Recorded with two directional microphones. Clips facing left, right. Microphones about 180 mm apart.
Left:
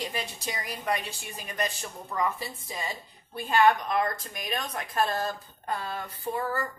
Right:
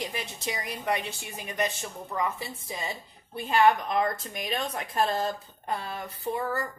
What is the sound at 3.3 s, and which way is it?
Speech, 25° right (ahead or behind).